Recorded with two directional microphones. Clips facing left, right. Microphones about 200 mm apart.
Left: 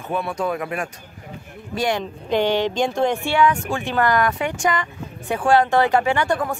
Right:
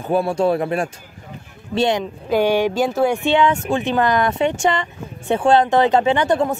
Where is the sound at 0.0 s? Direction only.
30° right (ahead or behind).